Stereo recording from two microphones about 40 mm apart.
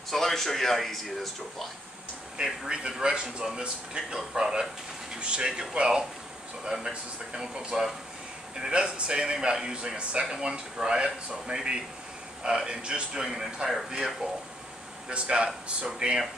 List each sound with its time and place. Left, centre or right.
0.1 s speech: centre
2.4 s a man's voice: centre
15.0 s speech: right